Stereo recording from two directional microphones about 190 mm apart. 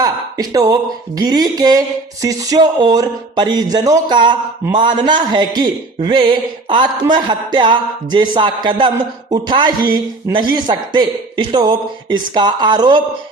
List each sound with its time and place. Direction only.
0.0 s speech: 20° right (ahead or behind)